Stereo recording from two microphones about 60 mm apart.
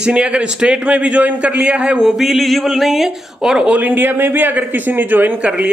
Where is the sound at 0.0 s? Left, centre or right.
Centre.